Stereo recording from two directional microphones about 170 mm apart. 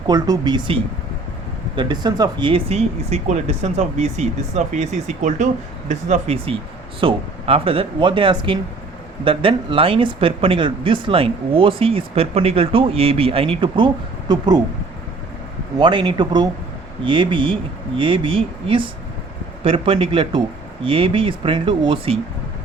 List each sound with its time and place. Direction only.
0.1 s speech: 25° right (ahead or behind)
15.8 s speech: 30° right (ahead or behind)